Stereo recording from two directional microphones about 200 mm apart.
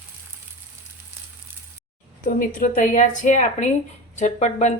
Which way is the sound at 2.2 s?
40° left (ahead or behind).